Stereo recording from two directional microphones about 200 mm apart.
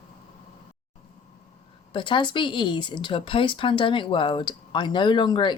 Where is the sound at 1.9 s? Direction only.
25° left (ahead or behind).